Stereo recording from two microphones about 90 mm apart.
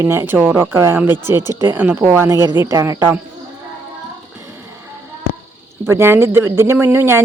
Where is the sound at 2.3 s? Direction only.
40° right (ahead or behind).